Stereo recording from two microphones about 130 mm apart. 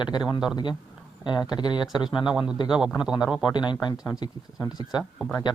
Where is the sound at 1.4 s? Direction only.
35° left (ahead or behind).